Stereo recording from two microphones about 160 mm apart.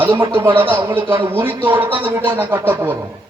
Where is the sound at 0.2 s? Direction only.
30° right (ahead or behind).